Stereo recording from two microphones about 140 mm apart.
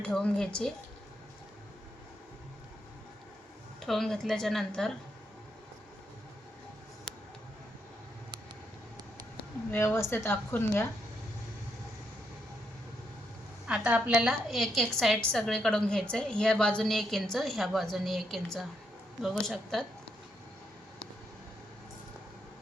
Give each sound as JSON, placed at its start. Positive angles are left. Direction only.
{"t": 0.0, "sound": "a woman's voice", "side_deg": 5}
{"t": 3.8, "sound": "a woman's voice", "side_deg": 0}
{"t": 9.7, "sound": "a woman's voice", "side_deg": 15}
{"t": 13.7, "sound": "a woman's voice", "side_deg": -10}